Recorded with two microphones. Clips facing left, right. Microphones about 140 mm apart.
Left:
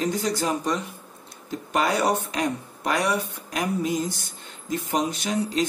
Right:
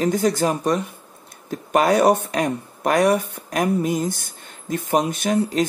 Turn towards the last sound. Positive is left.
turn(degrees=-55)  # may be behind; listen again after turning